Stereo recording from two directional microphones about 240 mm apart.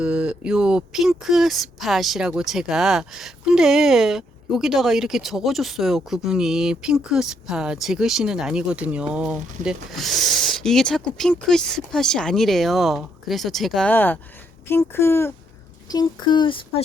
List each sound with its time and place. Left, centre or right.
0.0 s speech: centre; by 16.8 s left